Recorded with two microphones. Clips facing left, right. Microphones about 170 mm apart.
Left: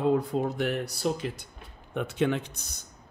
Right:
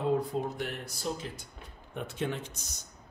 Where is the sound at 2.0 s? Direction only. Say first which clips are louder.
Left 7 dB; 85° left; by 2.8 s 55° left (ahead or behind).